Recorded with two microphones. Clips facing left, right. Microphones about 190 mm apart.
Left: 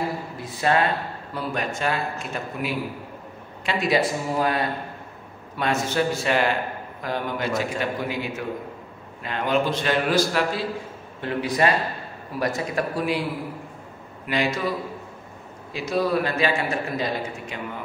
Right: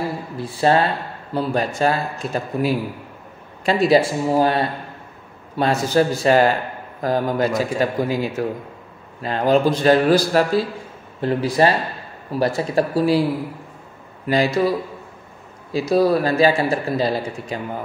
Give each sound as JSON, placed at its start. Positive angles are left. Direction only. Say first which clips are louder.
{"t": 0.4, "sound": "a man's voice", "louder": "right 5 dB", "side_deg": -30}
{"t": 14.2, "sound": "a man's voice", "louder": "right 7 dB", "side_deg": -35}
{"t": 15.7, "sound": "a man's voice", "louder": "right 7 dB", "side_deg": -35}